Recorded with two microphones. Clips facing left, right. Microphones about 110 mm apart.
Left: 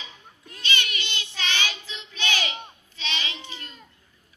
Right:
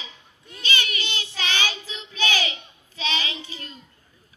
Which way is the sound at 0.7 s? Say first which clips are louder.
Right 2 dB; 40° right (ahead or behind).